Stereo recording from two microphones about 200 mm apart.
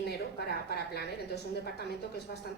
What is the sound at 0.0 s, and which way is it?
A woman's voice, 55° left (ahead or behind).